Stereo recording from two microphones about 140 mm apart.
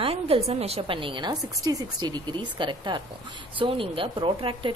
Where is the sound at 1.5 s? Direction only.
25° right (ahead or behind).